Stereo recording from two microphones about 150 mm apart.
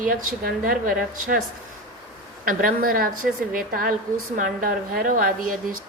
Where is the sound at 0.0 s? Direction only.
70° right (ahead or behind).